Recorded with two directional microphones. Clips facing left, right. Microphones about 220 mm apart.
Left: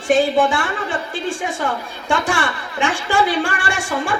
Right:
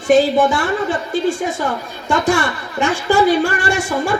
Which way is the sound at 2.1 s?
40° right (ahead or behind).